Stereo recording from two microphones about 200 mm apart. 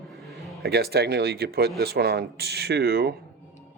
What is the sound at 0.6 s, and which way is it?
Speech, 55° right (ahead or behind).